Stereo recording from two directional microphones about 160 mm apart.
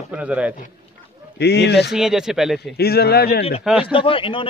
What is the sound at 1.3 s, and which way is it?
Speech, 90° left.